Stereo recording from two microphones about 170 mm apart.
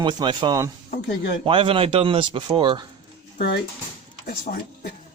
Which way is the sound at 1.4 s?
30° right (ahead or behind).